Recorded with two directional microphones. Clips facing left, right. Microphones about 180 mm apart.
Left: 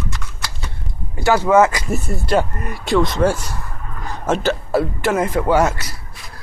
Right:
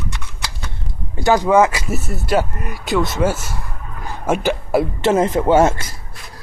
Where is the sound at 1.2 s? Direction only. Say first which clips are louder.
Even; 15° right (ahead or behind).